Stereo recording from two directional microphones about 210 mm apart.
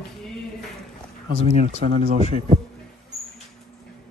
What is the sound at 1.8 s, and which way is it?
Speech, 35° right (ahead or behind).